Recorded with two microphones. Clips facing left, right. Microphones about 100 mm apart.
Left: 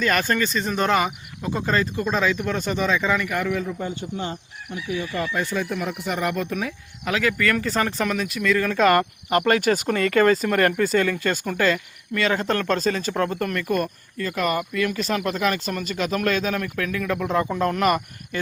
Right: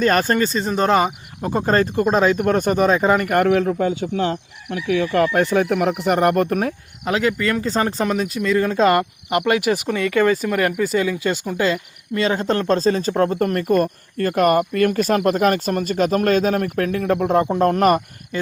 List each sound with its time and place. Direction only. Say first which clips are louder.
0.0 s speech: right 5 dB; 35° right (ahead or behind)
7.0 s speech: right 3 dB; 30° right (ahead or behind)
9.5 s speech: right 2 dB; 10° right (ahead or behind); by 13.9 s 35° right (ahead or behind)
14.2 s speech: right 8 dB; 50° right (ahead or behind)